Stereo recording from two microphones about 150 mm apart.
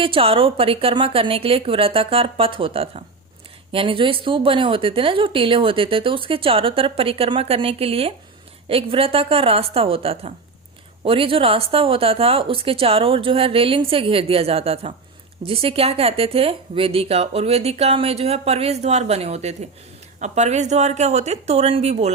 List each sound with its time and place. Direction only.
0.0 s a woman's voice: 35° right (ahead or behind)